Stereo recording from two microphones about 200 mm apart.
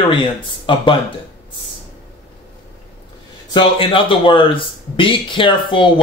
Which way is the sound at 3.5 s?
25° left (ahead or behind).